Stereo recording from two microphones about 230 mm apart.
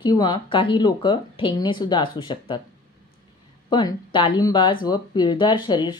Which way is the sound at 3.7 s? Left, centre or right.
Centre.